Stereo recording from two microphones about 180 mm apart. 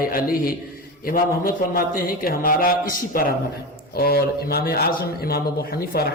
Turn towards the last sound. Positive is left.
turn(degrees=55)  # may be behind; listen again after turning